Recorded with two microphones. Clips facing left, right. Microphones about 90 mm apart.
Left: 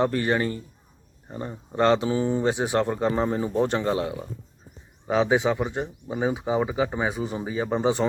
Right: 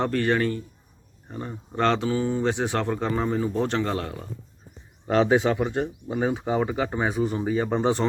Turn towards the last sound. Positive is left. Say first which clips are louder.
# right 1 dB
turn(degrees=5)  # may be behind; listen again after turning